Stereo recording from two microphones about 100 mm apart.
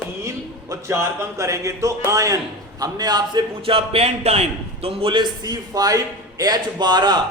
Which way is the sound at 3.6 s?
75° right (ahead or behind).